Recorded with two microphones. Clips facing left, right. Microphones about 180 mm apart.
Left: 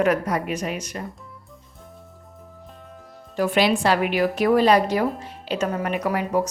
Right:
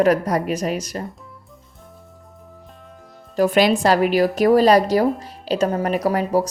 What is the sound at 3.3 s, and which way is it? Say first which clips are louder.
A woman's voice: right 4 dB; 40° right (ahead or behind).